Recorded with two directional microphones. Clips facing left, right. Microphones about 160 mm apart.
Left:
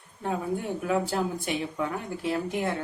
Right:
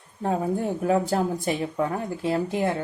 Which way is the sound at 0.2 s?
40° right (ahead or behind).